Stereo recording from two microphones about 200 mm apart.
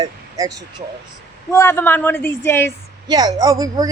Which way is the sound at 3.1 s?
20° right (ahead or behind).